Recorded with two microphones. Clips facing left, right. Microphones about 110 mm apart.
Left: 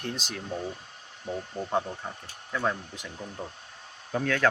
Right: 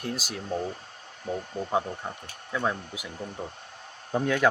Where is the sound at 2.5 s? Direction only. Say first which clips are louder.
Right 1 dB; 5° right (ahead or behind).